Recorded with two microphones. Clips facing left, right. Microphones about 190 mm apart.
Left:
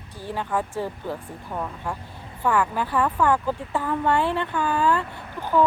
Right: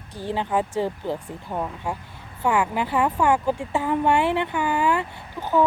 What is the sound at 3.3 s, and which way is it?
Speech, 10° right (ahead or behind).